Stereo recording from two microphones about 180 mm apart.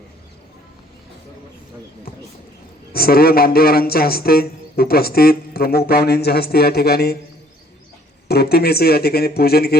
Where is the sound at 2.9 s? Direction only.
55° left (ahead or behind).